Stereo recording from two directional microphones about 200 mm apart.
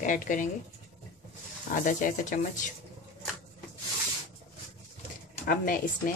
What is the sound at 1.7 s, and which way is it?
Speech, 40° left (ahead or behind).